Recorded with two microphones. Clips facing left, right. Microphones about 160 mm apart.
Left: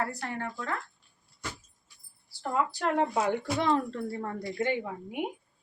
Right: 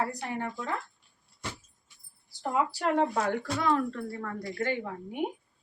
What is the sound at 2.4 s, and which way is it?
Speech, 5° right (ahead or behind).